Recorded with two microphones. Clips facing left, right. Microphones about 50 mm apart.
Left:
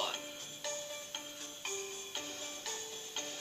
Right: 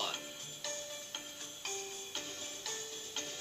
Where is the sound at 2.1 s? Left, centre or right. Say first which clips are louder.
Left 1 dB; centre.